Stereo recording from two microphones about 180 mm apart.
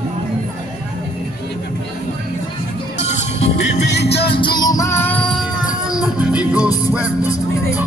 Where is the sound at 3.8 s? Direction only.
70° left (ahead or behind).